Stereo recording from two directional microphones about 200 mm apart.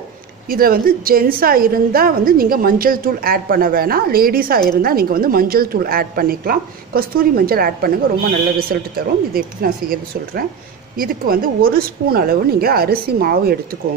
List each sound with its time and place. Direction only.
0.5 s a woman's voice: 45° right (ahead or behind)